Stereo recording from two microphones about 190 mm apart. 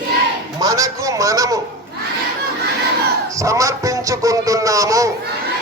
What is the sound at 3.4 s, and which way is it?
Speech, 15° right (ahead or behind).